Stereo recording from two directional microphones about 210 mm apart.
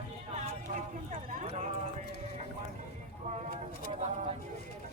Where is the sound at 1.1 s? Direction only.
30° right (ahead or behind).